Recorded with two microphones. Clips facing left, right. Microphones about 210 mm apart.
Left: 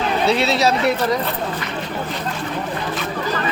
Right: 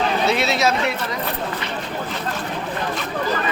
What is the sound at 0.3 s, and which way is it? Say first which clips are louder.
Speech: left 4 dB; 35° left (ahead or behind).